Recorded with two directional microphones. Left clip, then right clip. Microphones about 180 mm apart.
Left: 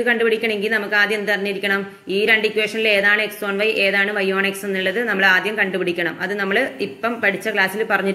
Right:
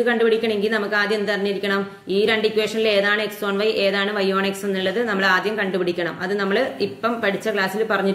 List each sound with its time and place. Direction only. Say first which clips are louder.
0.3 s a woman's voice: left 1 dB; 25° left (ahead or behind)
2.5 s a woman's voice: left 1 dB; 25° left (ahead or behind)
7.2 s a woman's voice: left 5 dB; 25° left (ahead or behind)